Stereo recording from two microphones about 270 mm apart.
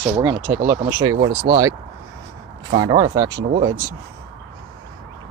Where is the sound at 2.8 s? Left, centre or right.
Centre.